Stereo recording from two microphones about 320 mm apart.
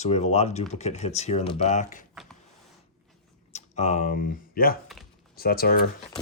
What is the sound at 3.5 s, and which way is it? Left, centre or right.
Speech, left.